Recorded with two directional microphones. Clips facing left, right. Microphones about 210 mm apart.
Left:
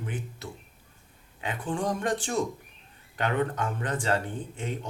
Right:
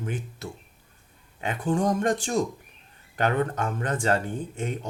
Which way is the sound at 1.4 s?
40° right (ahead or behind).